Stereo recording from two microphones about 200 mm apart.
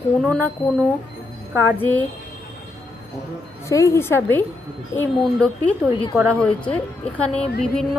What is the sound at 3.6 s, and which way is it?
A woman's voice, 15° left (ahead or behind).